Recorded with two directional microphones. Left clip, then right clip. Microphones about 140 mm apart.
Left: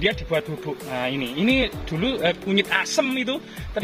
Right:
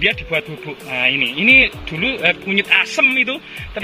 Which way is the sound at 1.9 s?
10° left (ahead or behind).